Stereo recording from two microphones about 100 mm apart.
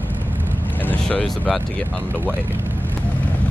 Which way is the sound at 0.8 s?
15° left (ahead or behind).